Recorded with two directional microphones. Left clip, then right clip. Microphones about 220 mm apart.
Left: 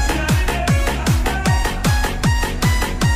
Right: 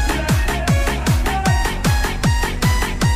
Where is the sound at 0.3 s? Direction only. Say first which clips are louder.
Left 1 dB; centre (ahead or behind).